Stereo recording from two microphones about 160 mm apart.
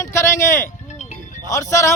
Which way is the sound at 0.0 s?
15° left (ahead or behind).